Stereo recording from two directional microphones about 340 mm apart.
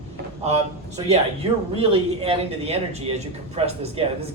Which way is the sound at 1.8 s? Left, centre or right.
Centre.